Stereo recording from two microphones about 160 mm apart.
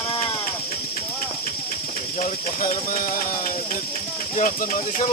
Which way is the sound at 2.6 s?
55° left (ahead or behind).